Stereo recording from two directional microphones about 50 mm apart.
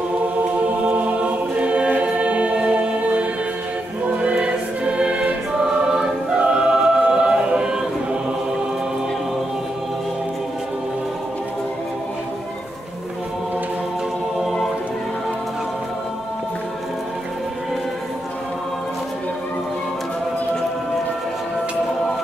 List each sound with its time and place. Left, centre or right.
0.8 s choir: right
4.2 s music: right
5.9 s choir: centre
14.4 s music: centre